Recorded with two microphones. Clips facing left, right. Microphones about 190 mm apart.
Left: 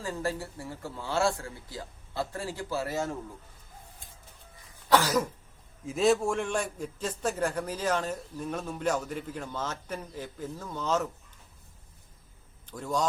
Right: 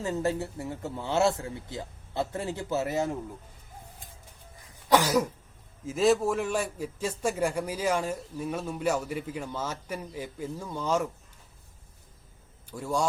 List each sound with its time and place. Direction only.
0.0 s speech: 20° right (ahead or behind)
4.9 s cough: 15° right (ahead or behind)
5.8 s a man's voice: centre (ahead or behind)
12.6 s a man's voice: 10° right (ahead or behind)